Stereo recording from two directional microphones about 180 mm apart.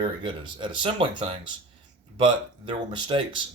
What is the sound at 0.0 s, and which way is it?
Speech, 30° right (ahead or behind).